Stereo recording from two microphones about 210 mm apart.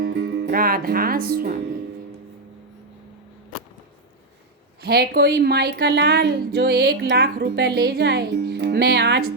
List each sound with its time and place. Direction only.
0.0 s speech: 50° right (ahead or behind)
4.8 s a woman's voice: 50° right (ahead or behind)